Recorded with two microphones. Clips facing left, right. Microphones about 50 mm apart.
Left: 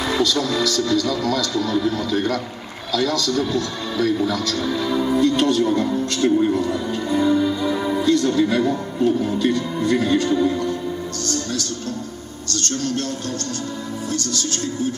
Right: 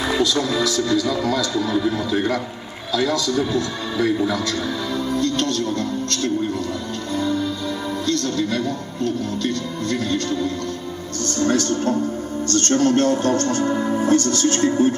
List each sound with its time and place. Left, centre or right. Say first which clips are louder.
0.1 s speech: even; centre
4.9 s speech: left 4 dB; centre
11.4 s speech: right 8 dB; right